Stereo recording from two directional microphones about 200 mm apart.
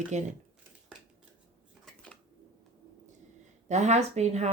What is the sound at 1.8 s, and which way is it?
Dishes, 5° left (ahead or behind).